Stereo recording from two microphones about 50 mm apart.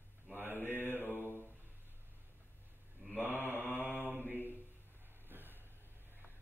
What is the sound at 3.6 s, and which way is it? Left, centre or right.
Mantra, left.